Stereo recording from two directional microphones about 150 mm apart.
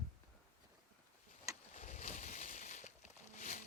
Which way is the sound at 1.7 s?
55° left (ahead or behind).